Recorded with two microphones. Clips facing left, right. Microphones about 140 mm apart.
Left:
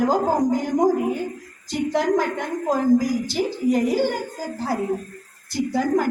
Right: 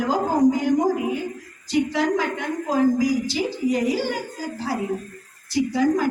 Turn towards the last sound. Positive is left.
turn(degrees=55)  # may be behind; listen again after turning